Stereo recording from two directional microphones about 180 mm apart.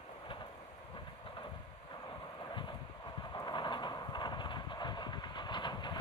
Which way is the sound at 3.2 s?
25° left (ahead or behind).